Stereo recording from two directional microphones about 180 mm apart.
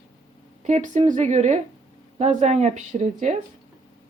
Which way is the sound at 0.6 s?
40° right (ahead or behind).